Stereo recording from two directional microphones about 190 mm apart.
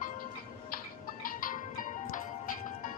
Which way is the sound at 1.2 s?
45° left (ahead or behind).